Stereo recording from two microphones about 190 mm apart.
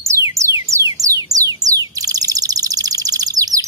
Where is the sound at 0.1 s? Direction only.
15° right (ahead or behind).